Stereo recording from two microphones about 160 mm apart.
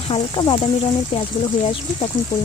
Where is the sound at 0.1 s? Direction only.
30° left (ahead or behind).